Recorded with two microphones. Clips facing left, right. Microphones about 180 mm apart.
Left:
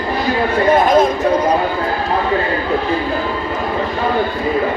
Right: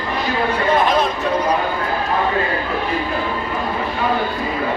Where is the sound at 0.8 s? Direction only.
45° left (ahead or behind).